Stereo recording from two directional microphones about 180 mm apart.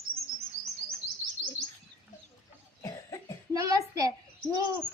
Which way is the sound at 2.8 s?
20° left (ahead or behind).